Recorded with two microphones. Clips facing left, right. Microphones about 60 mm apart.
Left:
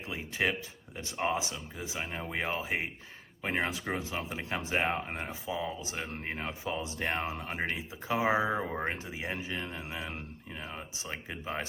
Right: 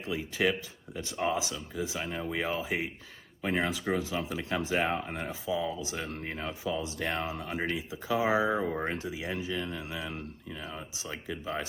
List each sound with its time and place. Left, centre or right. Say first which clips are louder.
0.0 s speech: right 3 dB; left
8.6 s speech: right 3 dB; centre
8.9 s speech: right 2 dB; left